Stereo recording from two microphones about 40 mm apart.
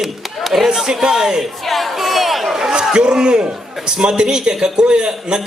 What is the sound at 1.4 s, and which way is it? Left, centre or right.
Crowd, centre.